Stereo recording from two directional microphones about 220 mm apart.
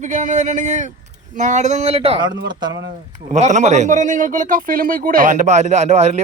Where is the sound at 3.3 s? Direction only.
30° right (ahead or behind).